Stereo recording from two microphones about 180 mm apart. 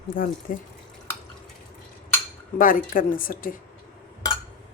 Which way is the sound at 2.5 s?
50° left (ahead or behind).